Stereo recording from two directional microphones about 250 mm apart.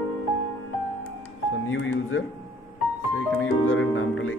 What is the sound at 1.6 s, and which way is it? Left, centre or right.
Speech, left.